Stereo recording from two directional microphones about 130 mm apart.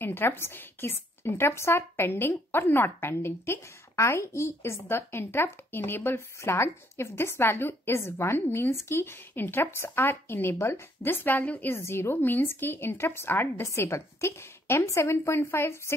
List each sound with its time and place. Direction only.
0.0 s a woman's voice: 15° left (ahead or behind)